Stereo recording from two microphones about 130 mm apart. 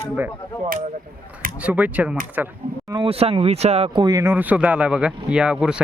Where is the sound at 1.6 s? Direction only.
10° right (ahead or behind).